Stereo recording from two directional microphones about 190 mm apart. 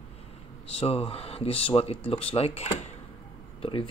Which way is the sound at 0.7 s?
30° left (ahead or behind).